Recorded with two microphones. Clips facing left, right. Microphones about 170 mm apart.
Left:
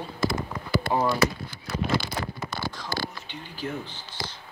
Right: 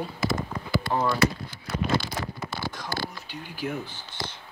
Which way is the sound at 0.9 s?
15° left (ahead or behind).